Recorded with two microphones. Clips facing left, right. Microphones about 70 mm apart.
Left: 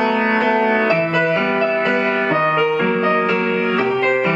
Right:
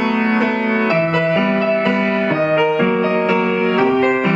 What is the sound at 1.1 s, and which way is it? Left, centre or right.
Music, centre.